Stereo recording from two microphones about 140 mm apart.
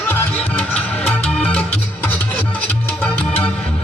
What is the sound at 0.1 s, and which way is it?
Music, 15° left (ahead or behind).